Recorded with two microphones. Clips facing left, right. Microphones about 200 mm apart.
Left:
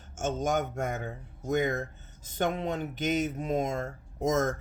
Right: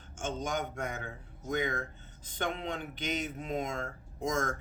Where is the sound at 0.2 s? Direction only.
45° left (ahead or behind).